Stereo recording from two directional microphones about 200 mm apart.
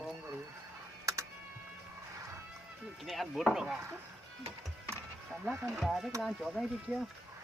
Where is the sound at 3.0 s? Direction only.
Centre (ahead or behind).